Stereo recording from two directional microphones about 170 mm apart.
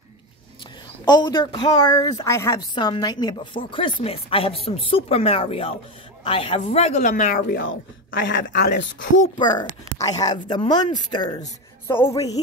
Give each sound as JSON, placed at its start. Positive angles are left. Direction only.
{"t": 1.0, "sound": "a woman's voice", "side_deg": 25}
{"t": 7.3, "sound": "speech", "side_deg": 70}
{"t": 9.4, "sound": "a woman's voice", "side_deg": 25}